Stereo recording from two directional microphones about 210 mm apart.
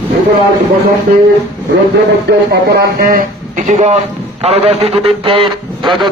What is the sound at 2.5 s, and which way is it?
A man's voice, 45° right (ahead or behind).